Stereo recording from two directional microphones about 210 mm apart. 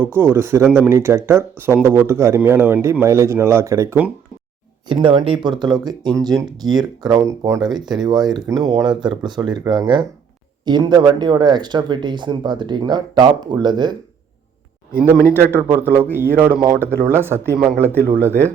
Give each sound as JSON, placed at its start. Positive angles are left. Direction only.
{"t": 0.0, "sound": "speech", "side_deg": -10}
{"t": 4.9, "sound": "speech", "side_deg": -25}
{"t": 15.7, "sound": "speech", "side_deg": -10}